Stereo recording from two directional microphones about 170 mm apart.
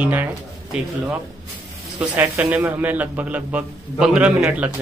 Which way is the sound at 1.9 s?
10° right (ahead or behind).